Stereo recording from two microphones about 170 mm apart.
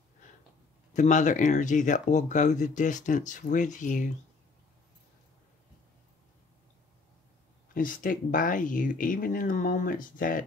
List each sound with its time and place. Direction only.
0.9 s speech: 45° left (ahead or behind)
7.7 s speech: 55° left (ahead or behind)